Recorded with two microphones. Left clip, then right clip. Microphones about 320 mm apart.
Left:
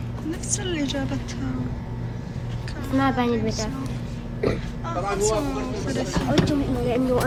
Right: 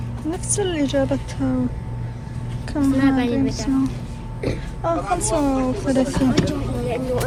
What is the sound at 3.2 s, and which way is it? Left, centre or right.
Speech, left.